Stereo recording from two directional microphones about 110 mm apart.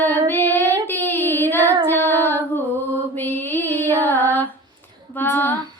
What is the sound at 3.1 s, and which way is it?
Mantra, 20° left (ahead or behind).